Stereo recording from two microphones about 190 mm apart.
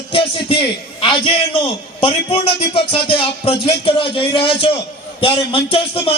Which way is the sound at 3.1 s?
30° left (ahead or behind).